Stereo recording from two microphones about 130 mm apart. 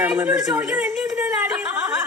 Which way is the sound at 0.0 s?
10° right (ahead or behind).